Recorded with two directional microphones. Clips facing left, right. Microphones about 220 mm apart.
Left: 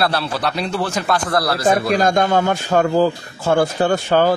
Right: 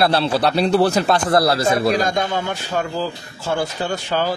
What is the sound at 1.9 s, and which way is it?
Speech, 50° left (ahead or behind).